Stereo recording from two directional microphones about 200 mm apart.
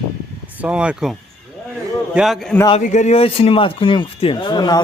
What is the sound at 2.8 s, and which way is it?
Speech, 35° left (ahead or behind).